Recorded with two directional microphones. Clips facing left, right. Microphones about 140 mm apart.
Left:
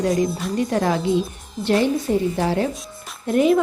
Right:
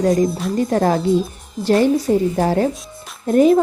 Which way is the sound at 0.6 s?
40° right (ahead or behind).